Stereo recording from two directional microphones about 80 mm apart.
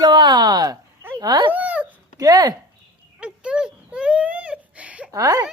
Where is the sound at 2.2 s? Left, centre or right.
Right.